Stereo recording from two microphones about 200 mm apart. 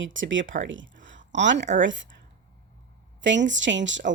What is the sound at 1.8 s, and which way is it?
Speech, 70° right (ahead or behind).